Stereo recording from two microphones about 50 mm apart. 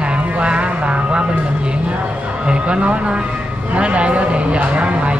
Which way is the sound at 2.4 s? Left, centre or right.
Right.